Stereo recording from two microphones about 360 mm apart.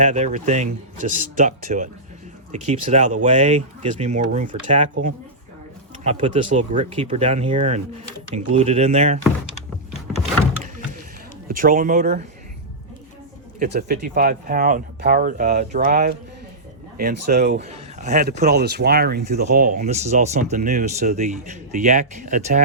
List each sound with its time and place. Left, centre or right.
0.0 s speech: centre
6.0 s speech: centre
11.4 s speech: right
13.6 s speech: right